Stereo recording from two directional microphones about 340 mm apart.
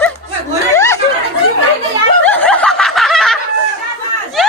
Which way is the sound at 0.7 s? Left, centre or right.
Centre.